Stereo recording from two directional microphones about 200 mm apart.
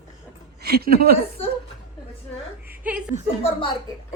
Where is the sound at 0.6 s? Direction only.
50° right (ahead or behind).